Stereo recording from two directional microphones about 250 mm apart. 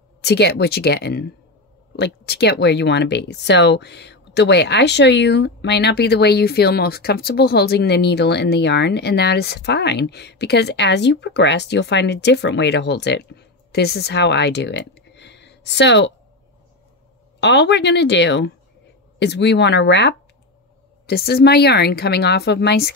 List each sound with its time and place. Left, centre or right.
0.2 s speech: left
17.4 s speech: left